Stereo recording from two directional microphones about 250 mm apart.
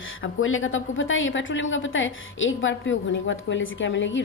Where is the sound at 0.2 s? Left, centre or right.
Left.